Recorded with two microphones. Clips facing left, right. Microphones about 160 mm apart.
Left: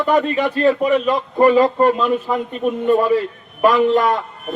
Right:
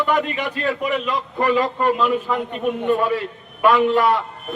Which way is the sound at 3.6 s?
40° left (ahead or behind).